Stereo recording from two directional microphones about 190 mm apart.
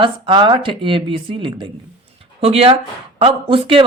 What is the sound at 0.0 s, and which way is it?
Speech, 25° right (ahead or behind).